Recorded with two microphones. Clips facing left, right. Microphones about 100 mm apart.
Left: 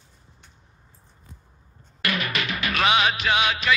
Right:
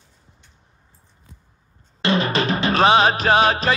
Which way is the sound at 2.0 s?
30° right (ahead or behind).